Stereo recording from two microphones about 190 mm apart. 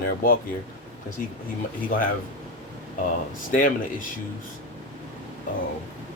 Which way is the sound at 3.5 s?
45° left (ahead or behind).